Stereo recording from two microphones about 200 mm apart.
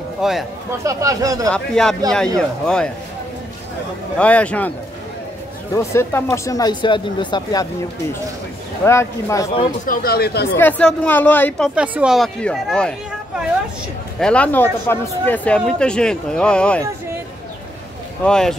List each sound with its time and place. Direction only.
0.2 s speech: centre (ahead or behind)
0.8 s speech: 15° right (ahead or behind)
1.5 s speech: 5° left (ahead or behind)
4.2 s speech: 5° left (ahead or behind)
5.8 s speech: 15° left (ahead or behind)
8.8 s speech: 15° left (ahead or behind)
9.8 s speech: 50° left (ahead or behind)
10.6 s speech: 5° left (ahead or behind)
14.2 s speech: 5° left (ahead or behind)
18.2 s speech: 5° left (ahead or behind)